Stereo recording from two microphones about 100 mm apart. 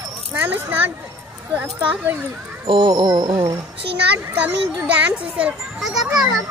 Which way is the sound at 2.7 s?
60° right (ahead or behind).